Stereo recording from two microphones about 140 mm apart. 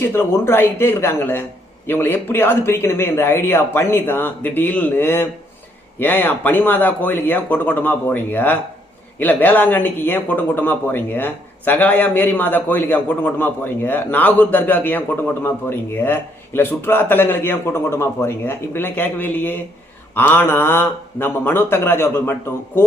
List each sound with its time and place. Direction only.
0.0 s speech: 15° left (ahead or behind)